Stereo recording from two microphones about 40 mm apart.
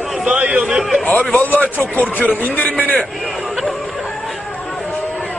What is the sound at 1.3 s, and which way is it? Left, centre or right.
A man's voice, left.